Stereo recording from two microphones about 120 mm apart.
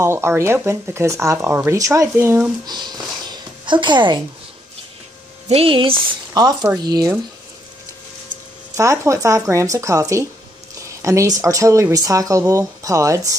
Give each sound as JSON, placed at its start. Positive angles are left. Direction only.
{"t": 0.0, "sound": "speech", "side_deg": -20}
{"t": 2.6, "sound": "a sound", "side_deg": -35}
{"t": 5.5, "sound": "speech", "side_deg": -50}
{"t": 8.7, "sound": "speech", "side_deg": -25}